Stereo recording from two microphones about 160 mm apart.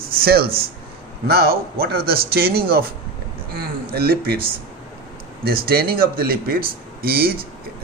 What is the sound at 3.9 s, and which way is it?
Speech, 75° right (ahead or behind).